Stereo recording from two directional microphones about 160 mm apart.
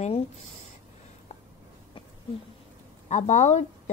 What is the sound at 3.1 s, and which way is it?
Speech, 45° left (ahead or behind).